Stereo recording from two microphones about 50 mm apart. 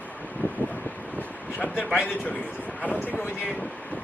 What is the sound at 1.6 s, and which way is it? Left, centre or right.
Speech, left.